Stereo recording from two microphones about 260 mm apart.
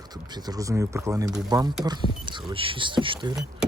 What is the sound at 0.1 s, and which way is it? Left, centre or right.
Speech, centre.